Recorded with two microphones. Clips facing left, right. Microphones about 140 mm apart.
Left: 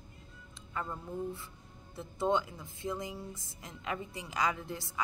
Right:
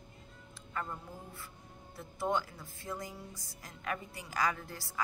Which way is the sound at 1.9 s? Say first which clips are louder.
Left 3 dB; 20° left (ahead or behind).